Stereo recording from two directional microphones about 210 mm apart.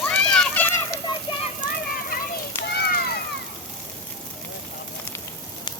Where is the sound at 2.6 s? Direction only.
50° left (ahead or behind).